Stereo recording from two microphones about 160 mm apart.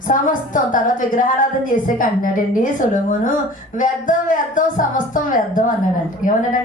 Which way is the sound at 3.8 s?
55° left (ahead or behind).